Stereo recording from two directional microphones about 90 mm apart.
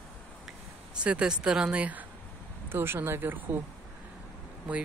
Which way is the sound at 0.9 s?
10° right (ahead or behind).